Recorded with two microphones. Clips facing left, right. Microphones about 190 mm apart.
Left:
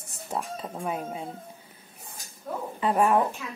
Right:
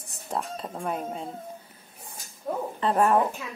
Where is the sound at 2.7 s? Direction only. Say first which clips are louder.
Even; 10° left (ahead or behind).